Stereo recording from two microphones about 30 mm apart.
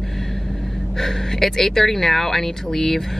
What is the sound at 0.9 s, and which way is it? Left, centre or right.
Speech, centre.